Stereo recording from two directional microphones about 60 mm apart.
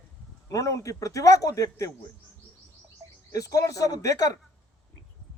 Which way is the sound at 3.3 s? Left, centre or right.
Left.